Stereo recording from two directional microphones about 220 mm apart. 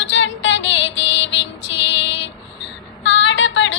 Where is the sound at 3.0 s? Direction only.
55° left (ahead or behind).